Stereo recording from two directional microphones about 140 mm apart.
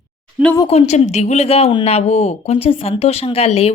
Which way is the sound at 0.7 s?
50° left (ahead or behind).